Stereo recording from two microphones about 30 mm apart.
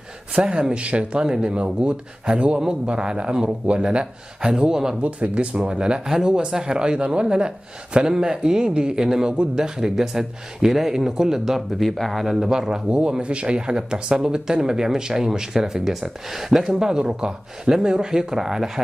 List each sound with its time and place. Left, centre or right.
0.4 s speech: right
0.7 s speech: right
5.0 s speech: right; by 11.8 s centre
12.0 s speech: centre
12.5 s speech: right
15.8 s speech: centre
16.7 s speech: right